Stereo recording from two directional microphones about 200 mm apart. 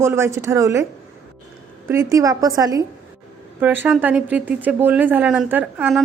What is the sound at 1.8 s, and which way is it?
Speech, 15° right (ahead or behind).